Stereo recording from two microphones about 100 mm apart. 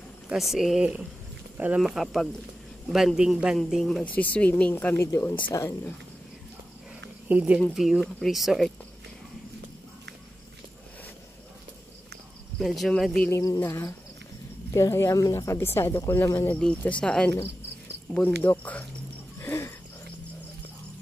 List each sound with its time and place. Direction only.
0.3 s speech: 5° right (ahead or behind)
3.5 s speech: 5° left (ahead or behind)
4.1 s speech: 15° left (ahead or behind)
4.9 s speech: 25° left (ahead or behind)
7.2 s speech: 15° right (ahead or behind)
7.7 s speech: centre (ahead or behind)
12.5 s speech: centre (ahead or behind)
13.3 s speech: 35° left (ahead or behind)
16.5 s speech: 10° left (ahead or behind)
19.4 s wheeze: 30° left (ahead or behind)